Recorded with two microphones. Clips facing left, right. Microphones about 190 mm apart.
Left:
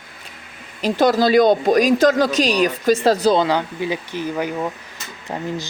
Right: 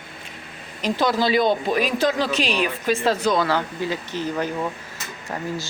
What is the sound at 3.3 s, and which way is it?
Speech, 15° left (ahead or behind).